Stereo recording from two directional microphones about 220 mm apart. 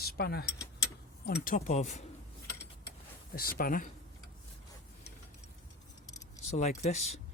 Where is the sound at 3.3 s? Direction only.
40° left (ahead or behind).